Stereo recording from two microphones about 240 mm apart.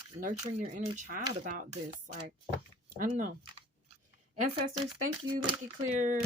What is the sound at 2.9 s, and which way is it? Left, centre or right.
Speech, right.